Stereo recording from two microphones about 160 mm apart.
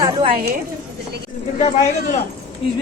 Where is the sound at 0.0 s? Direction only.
30° right (ahead or behind).